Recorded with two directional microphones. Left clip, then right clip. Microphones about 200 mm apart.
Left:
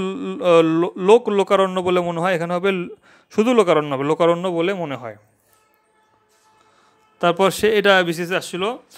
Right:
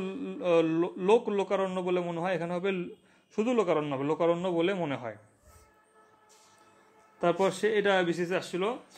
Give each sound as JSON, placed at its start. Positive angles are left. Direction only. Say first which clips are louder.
{"t": 0.0, "sound": "speech", "louder": "left 12 dB", "side_deg": 30}
{"t": 7.2, "sound": "speech", "louder": "left 10 dB", "side_deg": 40}